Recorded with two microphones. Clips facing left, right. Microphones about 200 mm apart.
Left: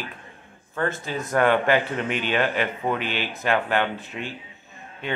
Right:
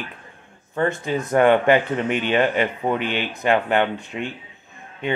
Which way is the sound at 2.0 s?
50° right (ahead or behind).